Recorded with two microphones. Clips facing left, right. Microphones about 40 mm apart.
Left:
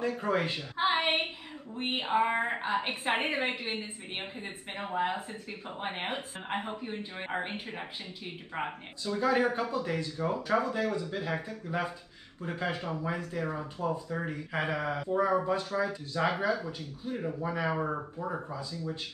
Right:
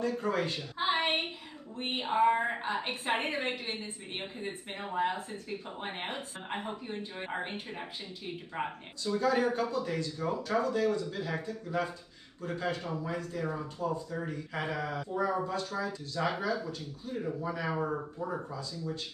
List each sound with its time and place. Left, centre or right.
0.0 s a woman's voice: centre